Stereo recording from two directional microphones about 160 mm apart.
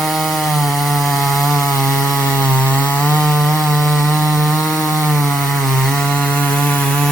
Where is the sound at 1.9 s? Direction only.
Centre (ahead or behind).